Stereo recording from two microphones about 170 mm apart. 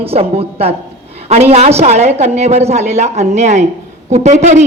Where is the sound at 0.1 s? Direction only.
35° right (ahead or behind).